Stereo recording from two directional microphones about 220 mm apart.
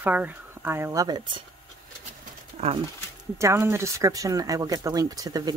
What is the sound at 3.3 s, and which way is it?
Speech, 10° right (ahead or behind).